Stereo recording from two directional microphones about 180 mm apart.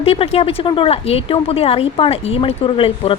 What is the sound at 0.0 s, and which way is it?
Speech, 35° left (ahead or behind).